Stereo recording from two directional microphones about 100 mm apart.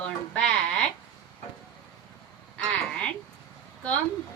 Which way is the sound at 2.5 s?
10° left (ahead or behind).